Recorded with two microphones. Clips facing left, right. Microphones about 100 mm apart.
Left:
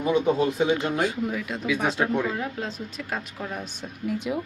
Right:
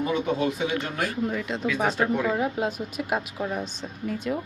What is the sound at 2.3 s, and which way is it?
A woman's voice, 15° right (ahead or behind).